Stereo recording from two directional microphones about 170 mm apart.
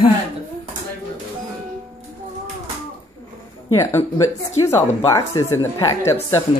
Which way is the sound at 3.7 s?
15° left (ahead or behind).